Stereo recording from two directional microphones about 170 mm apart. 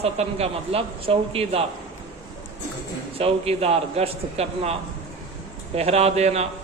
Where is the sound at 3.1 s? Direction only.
35° right (ahead or behind).